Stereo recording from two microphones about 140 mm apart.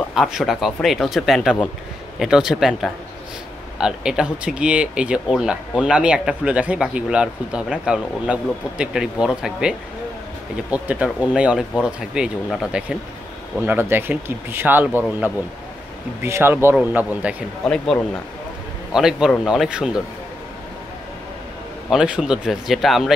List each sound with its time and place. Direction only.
0.1 s speech: centre (ahead or behind)
13.7 s speech: 15° right (ahead or behind)
17.6 s speech: centre (ahead or behind)
18.9 s speech: 5° right (ahead or behind)
21.9 s speech: 5° right (ahead or behind)